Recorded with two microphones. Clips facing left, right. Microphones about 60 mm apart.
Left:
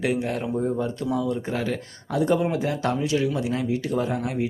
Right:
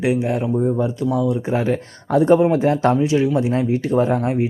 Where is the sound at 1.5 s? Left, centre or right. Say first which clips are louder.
Right 7 dB; right.